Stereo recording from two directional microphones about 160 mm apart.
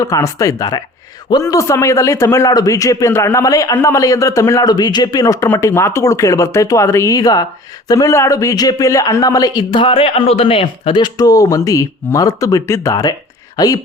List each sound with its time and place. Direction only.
0.0 s speech: 20° left (ahead or behind)